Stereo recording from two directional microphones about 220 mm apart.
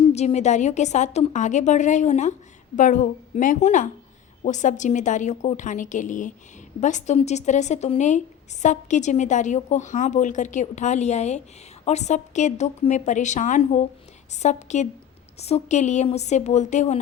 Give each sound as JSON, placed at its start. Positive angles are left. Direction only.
{"t": 0.1, "sound": "a woman's voice", "side_deg": 30}